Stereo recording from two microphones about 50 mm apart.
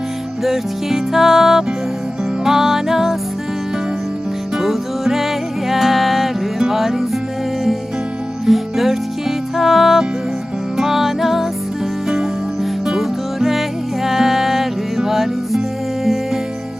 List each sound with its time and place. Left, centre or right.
0.4 s music: centre
4.5 s music: centre
8.4 s music: centre
12.9 s music: centre